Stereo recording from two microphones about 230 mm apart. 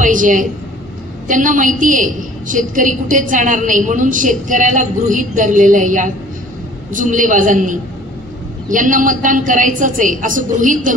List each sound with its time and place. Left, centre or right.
0.0 s a woman's voice: right